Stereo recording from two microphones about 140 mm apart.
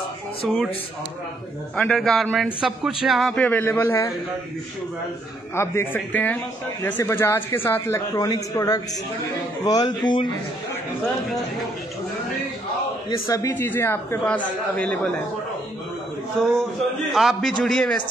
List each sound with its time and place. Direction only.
1.8 s a man's voice: 5° left (ahead or behind)
3.4 s a man's voice: 15° left (ahead or behind)
5.6 s a man's voice: 15° left (ahead or behind); by 10.2 s 30° left (ahead or behind)
13.3 s a man's voice: 25° left (ahead or behind)
16.4 s a man's voice: 5° left (ahead or behind)